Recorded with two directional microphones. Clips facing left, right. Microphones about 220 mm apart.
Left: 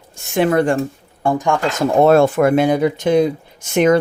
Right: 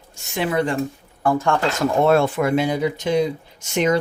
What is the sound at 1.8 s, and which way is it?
Speech, 35° left (ahead or behind).